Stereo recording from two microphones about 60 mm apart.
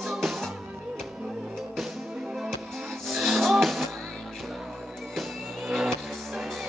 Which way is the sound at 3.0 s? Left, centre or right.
Centre.